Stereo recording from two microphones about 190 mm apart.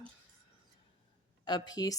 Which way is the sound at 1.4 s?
20° left (ahead or behind).